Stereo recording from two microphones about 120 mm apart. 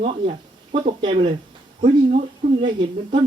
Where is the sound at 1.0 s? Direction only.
45° right (ahead or behind).